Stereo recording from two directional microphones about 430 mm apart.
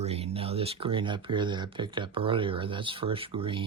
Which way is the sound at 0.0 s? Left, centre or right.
Centre.